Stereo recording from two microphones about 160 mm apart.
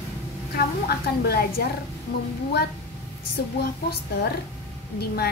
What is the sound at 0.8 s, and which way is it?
Speech, 75° left (ahead or behind).